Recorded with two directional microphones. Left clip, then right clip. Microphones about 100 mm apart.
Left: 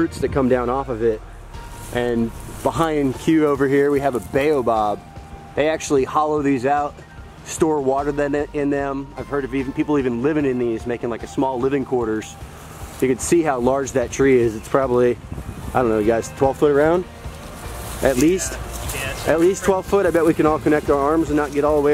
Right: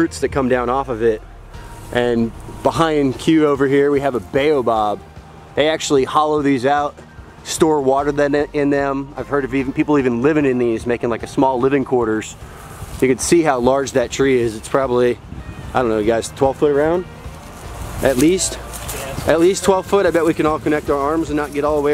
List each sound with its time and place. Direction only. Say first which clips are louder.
0.0 s speech: right 2 dB; 45° right (ahead or behind); by 6.9 s 20° right (ahead or behind)
7.5 s speech: right 4 dB; 35° right (ahead or behind); by 16.4 s 15° right (ahead or behind)
16.4 s speech: even; centre (ahead or behind)
18.0 s speech: right 2 dB; 25° right (ahead or behind)